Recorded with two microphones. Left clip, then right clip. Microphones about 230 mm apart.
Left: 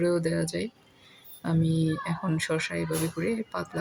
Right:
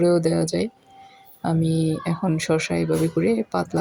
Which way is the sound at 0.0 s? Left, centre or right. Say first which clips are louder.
Right 7 dB; centre.